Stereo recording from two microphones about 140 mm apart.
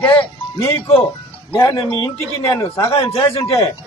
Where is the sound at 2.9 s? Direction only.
40° left (ahead or behind).